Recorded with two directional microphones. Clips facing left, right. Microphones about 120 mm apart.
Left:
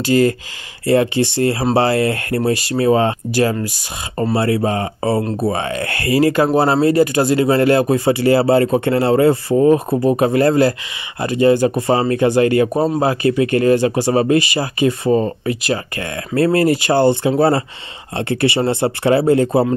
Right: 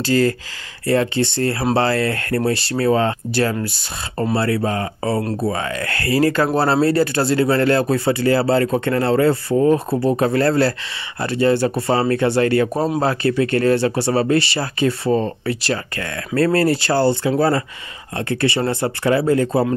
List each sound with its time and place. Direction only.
0.0 s speech: 15° left (ahead or behind)